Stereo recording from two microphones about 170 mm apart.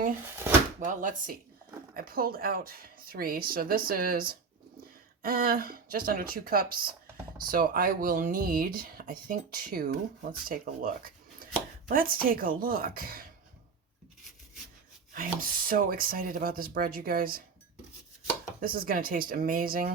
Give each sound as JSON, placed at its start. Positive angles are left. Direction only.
{"t": 0.8, "sound": "speech", "side_deg": -50}
{"t": 15.1, "sound": "speech", "side_deg": -55}
{"t": 18.6, "sound": "speech", "side_deg": -60}